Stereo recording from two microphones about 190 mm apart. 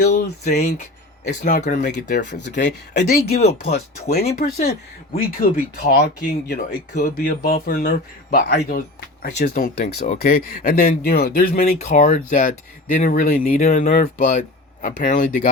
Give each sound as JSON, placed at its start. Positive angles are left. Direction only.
{"t": 0.6, "sound": "speech", "side_deg": 40}
{"t": 2.1, "sound": "speech", "side_deg": 65}
{"t": 3.7, "sound": "speech", "side_deg": 35}
{"t": 4.1, "sound": "speech", "side_deg": 55}
{"t": 8.4, "sound": "speech", "side_deg": 60}
{"t": 9.2, "sound": "speech", "side_deg": 45}